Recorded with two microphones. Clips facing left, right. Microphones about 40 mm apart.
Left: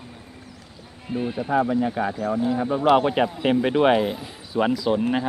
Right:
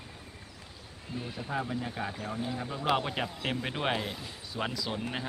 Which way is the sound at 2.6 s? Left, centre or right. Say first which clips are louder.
Left 11 dB; left.